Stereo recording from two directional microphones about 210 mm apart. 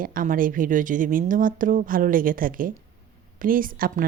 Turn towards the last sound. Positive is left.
turn(degrees=-40)  # may be behind; listen again after turning